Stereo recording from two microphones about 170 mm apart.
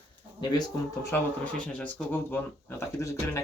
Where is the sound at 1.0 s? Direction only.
10° left (ahead or behind).